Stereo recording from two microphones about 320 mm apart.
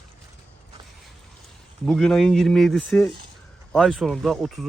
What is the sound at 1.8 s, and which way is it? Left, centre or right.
Speech, centre.